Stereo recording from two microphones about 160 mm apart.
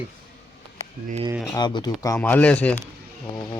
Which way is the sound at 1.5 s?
25° left (ahead or behind).